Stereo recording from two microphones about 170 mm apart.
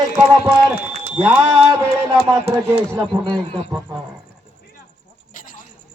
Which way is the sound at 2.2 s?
25° right (ahead or behind).